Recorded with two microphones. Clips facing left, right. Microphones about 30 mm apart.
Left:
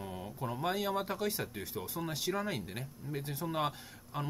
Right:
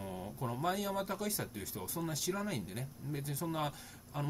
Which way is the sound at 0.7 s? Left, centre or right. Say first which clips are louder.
Left 3 dB; left.